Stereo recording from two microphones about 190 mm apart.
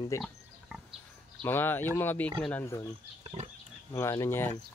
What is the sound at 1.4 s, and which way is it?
Speech, 10° left (ahead or behind).